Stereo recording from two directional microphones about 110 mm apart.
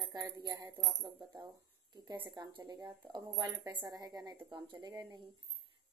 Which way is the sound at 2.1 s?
40° right (ahead or behind).